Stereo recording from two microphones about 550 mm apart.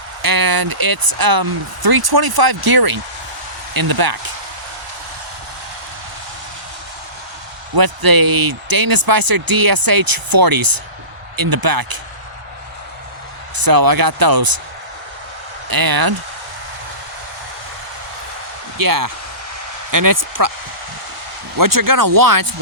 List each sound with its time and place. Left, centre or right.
0.2 s speech: right
7.8 s speech: right
13.6 s speech: right
15.7 s speech: right
18.8 s speech: right
21.6 s speech: right